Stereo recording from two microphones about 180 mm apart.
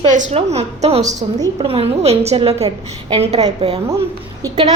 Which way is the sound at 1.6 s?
30° right (ahead or behind).